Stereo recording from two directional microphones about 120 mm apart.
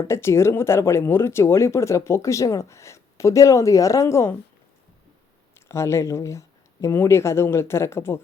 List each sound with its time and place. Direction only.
0.0 s speech: 20° left (ahead or behind)
5.5 s speech: 25° left (ahead or behind)